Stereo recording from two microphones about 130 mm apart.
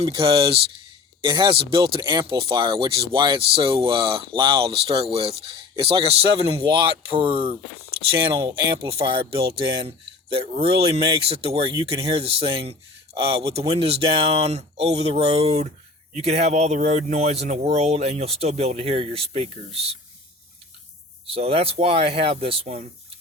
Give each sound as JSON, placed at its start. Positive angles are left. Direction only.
{"t": 0.0, "sound": "a man's voice", "side_deg": -45}
{"t": 21.2, "sound": "speech", "side_deg": -50}